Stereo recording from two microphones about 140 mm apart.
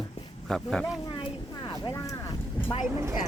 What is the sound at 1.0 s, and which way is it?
Speech, 35° left (ahead or behind).